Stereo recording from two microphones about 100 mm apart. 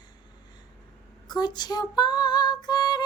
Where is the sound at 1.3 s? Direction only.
45° left (ahead or behind).